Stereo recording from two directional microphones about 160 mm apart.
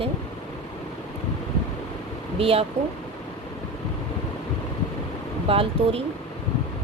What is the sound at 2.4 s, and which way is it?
Speech, 40° right (ahead or behind).